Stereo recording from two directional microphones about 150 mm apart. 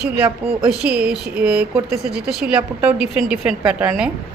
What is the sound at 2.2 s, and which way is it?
A woman's voice, 5° right (ahead or behind).